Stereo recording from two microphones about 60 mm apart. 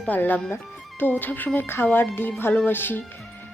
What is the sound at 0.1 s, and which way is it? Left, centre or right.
Speech, left.